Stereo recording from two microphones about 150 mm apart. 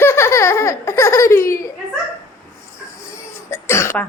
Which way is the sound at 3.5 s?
20° left (ahead or behind).